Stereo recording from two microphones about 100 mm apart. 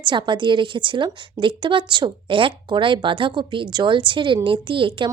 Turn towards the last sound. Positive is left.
turn(degrees=-60)  # may be behind; listen again after turning